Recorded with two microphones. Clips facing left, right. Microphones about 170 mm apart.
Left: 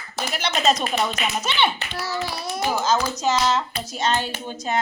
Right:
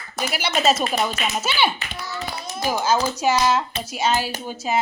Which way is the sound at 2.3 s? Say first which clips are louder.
Left 2 dB; 70° left (ahead or behind).